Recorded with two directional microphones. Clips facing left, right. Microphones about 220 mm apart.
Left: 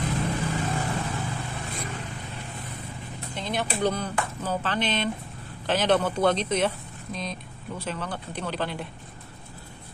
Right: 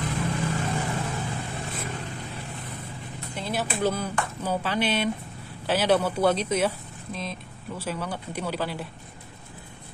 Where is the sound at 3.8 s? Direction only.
5° right (ahead or behind).